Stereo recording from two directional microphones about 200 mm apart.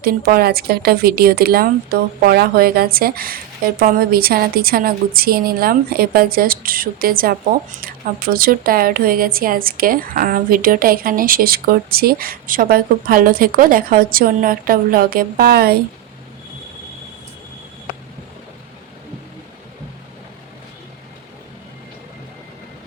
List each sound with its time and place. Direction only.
0.0 s a woman's voice: 50° right (ahead or behind)